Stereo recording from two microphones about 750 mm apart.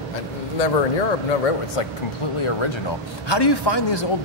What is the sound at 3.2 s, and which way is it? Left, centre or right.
Speech, left.